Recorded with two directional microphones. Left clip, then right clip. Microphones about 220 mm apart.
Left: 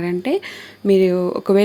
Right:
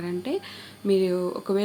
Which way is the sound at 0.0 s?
35° left (ahead or behind).